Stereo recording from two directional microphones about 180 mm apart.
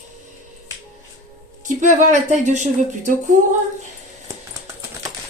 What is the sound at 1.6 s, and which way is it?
A woman's voice, 45° right (ahead or behind).